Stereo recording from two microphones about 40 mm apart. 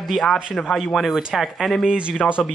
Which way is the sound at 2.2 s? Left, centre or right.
Left.